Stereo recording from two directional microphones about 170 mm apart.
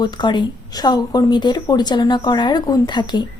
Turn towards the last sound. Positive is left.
turn(degrees=25)  # may be behind; listen again after turning